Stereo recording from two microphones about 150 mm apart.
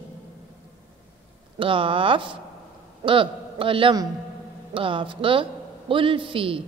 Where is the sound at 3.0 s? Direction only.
35° right (ahead or behind).